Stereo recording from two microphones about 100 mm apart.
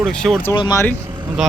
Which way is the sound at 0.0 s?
5° left (ahead or behind).